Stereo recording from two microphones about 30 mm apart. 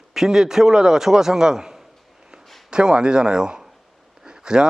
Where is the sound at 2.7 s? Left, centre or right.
Right.